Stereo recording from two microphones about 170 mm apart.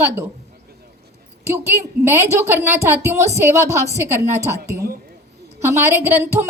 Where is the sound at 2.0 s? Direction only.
15° right (ahead or behind).